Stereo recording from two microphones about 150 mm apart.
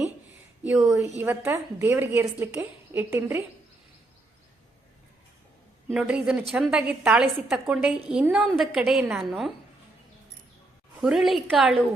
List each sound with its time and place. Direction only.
0.6 s a woman's voice: 10° right (ahead or behind)
5.9 s a woman's voice: 5° right (ahead or behind)
11.0 s a woman's voice: 5° right (ahead or behind)